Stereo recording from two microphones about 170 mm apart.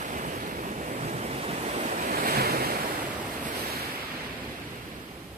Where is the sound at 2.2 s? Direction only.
65° right (ahead or behind).